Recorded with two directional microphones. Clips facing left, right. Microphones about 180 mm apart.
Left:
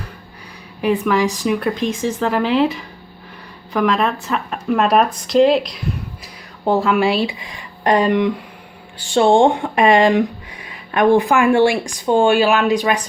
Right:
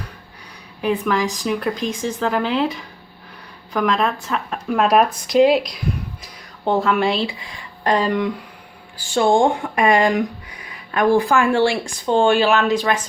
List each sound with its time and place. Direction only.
0.8 s speech: 5° left (ahead or behind)
7.3 s speech: 20° left (ahead or behind)
9.1 s speech: 30° left (ahead or behind)